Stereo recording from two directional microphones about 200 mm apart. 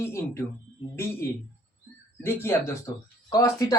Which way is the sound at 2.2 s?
10° left (ahead or behind).